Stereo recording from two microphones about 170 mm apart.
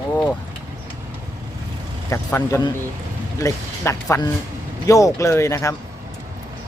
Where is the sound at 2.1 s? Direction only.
15° left (ahead or behind).